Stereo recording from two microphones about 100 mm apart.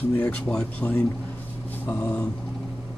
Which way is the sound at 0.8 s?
5° left (ahead or behind).